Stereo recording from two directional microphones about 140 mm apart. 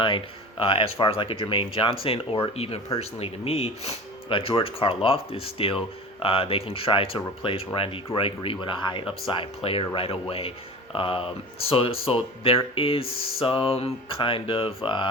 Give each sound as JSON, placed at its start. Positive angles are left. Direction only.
{"t": 0.0, "sound": "speech", "side_deg": 35}